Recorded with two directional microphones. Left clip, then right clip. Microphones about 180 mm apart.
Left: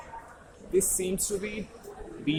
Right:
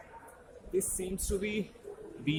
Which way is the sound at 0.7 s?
Centre (ahead or behind).